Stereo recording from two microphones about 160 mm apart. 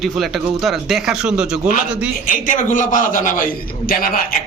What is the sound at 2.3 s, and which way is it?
A man's voice, 55° left (ahead or behind).